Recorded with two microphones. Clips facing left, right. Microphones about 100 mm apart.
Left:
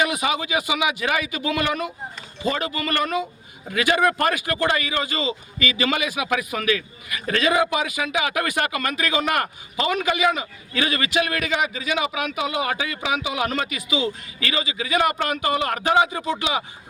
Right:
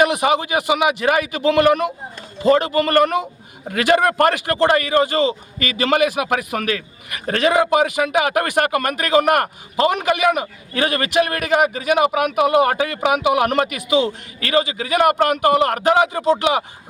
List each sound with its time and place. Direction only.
0.0 s a man's voice: 55° right (ahead or behind)
4.5 s speech: 35° right (ahead or behind)
4.8 s a man's voice: 50° right (ahead or behind)